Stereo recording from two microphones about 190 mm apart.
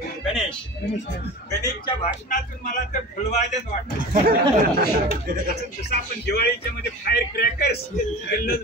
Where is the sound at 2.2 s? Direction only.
45° left (ahead or behind).